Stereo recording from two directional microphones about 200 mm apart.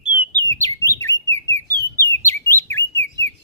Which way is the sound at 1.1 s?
65° left (ahead or behind).